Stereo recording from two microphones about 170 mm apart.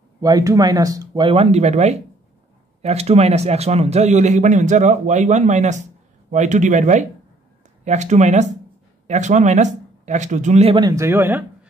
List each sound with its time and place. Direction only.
0.2 s speech: 20° right (ahead or behind)
1.3 s a man's voice: 40° right (ahead or behind)
10.8 s speech: 20° right (ahead or behind)